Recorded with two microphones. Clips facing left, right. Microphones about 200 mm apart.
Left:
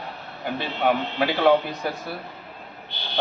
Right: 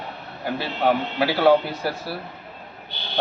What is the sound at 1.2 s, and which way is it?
Speech, 5° right (ahead or behind).